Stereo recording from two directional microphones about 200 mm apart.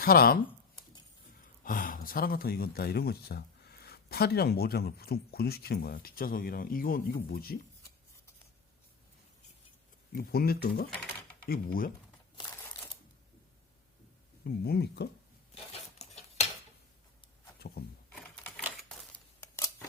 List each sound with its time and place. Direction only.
0.0 s speech: 50° left (ahead or behind)
1.6 s speech: 45° left (ahead or behind)
10.2 s speech: 50° left (ahead or behind)
12.6 s a sound: 15° left (ahead or behind)
14.4 s speech: 50° left (ahead or behind)
15.5 s cutlery: 30° left (ahead or behind)
18.1 s typewriter: 5° left (ahead or behind)